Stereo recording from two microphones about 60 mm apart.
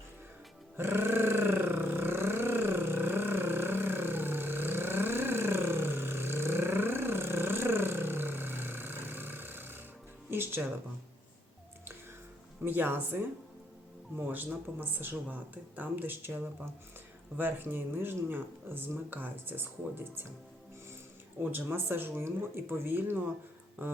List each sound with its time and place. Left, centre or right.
0.8 s a sound: right
10.2 s music: right
12.6 s speech: right
14.2 s speech: right
21.5 s speech: right